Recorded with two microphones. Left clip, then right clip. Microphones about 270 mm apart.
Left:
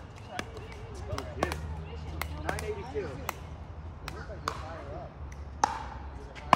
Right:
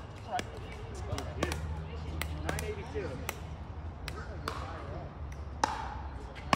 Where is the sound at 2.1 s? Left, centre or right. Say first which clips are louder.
Left 3 dB; centre.